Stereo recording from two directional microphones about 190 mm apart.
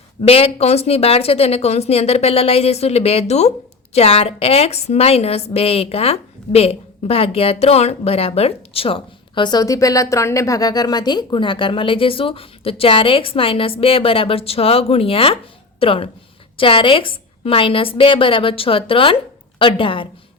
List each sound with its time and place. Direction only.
0.2 s a woman's voice: 30° left (ahead or behind)